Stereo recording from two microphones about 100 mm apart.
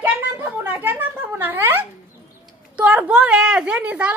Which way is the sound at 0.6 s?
20° right (ahead or behind).